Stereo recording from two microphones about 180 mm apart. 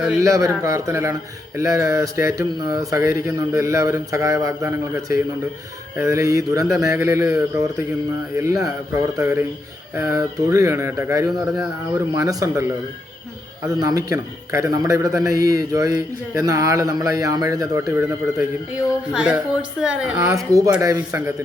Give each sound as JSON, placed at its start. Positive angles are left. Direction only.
{"t": 0.2, "sound": "a man's voice", "side_deg": -20}
{"t": 13.7, "sound": "a man's voice", "side_deg": -20}
{"t": 19.1, "sound": "a woman's voice", "side_deg": -5}
{"t": 20.1, "sound": "a man's voice", "side_deg": -15}